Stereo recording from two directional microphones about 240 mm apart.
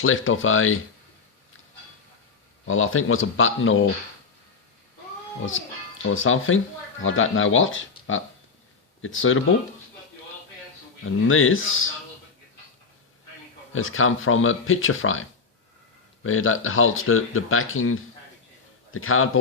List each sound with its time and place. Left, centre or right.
0.0 s speech: left
2.6 s speech: left
5.5 s speech: left
11.0 s speech: left
13.7 s speech: left